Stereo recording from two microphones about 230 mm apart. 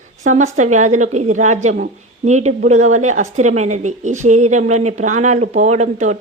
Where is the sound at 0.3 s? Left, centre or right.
Right.